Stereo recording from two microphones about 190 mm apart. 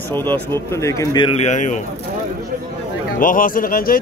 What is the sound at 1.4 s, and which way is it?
Speech, 40° left (ahead or behind).